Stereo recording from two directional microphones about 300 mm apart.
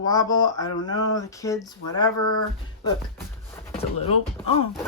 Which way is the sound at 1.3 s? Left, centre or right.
Centre.